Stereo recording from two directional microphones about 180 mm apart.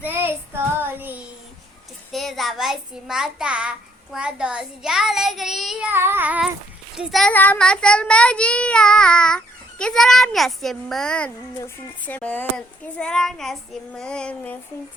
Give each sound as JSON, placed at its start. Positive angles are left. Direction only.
{"t": 0.0, "sound": "child singing", "side_deg": -10}
{"t": 2.1, "sound": "a child's voice", "side_deg": 0}
{"t": 5.9, "sound": "a child's voice", "side_deg": -10}